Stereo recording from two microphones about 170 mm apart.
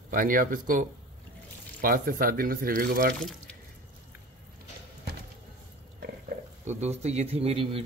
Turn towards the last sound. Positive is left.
turn(degrees=-35)  # may be behind; listen again after turning